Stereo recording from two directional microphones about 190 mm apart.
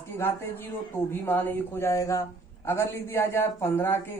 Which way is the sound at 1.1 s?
10° left (ahead or behind).